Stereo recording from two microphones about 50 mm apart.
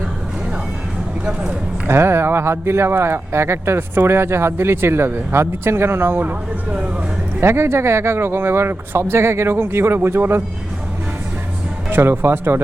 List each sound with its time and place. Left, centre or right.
1.2 s speech: right
1.9 s speech: right
3.9 s speech: right
7.4 s speech: right
11.9 s speech: right